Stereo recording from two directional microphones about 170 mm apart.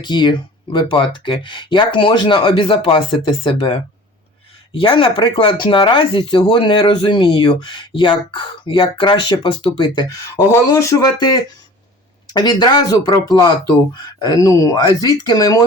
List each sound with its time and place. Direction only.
0.0 s speech: 25° left (ahead or behind)